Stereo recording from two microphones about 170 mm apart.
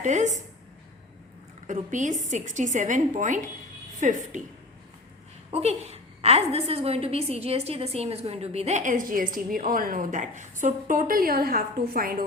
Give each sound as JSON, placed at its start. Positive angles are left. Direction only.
{"t": 0.0, "sound": "a woman's voice", "side_deg": -45}
{"t": 1.6, "sound": "a woman's voice", "side_deg": -50}
{"t": 5.5, "sound": "a woman's voice", "side_deg": -40}